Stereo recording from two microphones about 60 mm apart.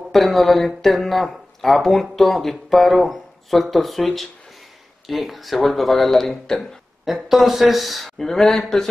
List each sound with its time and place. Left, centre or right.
0.1 s speech: centre
7.1 s speech: centre